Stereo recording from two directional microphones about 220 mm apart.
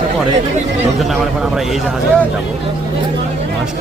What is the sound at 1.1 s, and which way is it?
Speech, centre (ahead or behind).